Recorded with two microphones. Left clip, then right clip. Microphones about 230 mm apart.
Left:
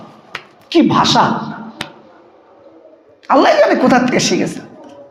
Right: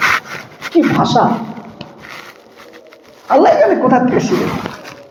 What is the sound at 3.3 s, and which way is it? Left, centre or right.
Speech, left.